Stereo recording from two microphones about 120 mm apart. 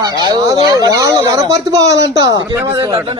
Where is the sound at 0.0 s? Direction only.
35° right (ahead or behind).